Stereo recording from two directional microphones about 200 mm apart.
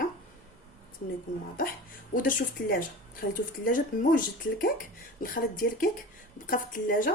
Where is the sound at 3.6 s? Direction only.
45° left (ahead or behind).